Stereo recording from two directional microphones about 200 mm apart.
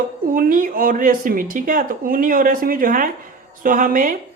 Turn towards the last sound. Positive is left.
turn(degrees=-40)  # may be behind; listen again after turning